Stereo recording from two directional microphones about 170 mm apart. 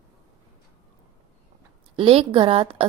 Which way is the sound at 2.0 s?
35° right (ahead or behind).